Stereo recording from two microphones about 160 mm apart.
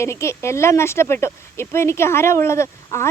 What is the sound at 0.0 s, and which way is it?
Speech, 15° left (ahead or behind).